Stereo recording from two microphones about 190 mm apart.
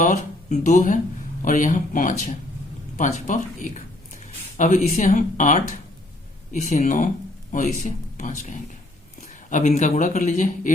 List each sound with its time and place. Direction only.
0.0 s a man's voice: 40° left (ahead or behind)